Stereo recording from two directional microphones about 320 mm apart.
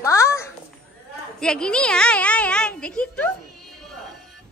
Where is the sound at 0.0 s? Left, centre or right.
Centre.